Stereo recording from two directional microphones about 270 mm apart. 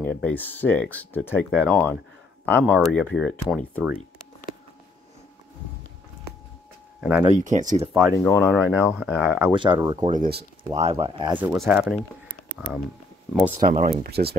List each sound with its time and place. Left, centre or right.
0.0 s speech: centre
7.0 s speech: centre
7.3 s speech: right
7.9 s speech: centre
8.8 s speech: centre
9.5 s speech: centre
10.1 s speech: right
11.3 s speech: centre
13.6 s speech: right